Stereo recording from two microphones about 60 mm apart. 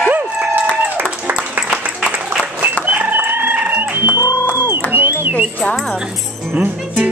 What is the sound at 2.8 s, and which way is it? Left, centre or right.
Chicken, right.